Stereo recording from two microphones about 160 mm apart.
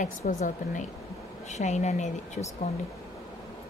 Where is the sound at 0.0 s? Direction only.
50° left (ahead or behind).